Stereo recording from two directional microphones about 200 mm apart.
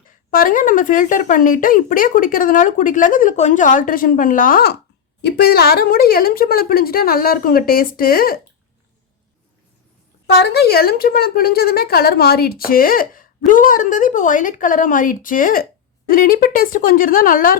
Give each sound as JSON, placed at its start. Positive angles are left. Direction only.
{"t": 0.3, "sound": "speech", "side_deg": 45}
{"t": 10.3, "sound": "a woman's voice", "side_deg": 55}